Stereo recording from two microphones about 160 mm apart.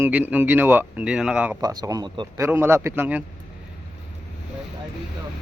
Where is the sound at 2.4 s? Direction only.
15° right (ahead or behind).